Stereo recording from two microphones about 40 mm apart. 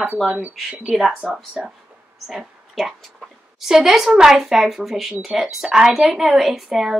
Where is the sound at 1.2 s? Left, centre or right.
Centre.